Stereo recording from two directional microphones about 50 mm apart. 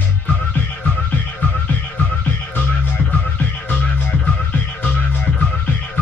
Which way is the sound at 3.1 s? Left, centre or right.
Left.